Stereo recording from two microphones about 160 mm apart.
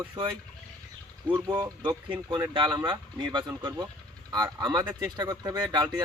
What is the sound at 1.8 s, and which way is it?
Speech, 30° right (ahead or behind).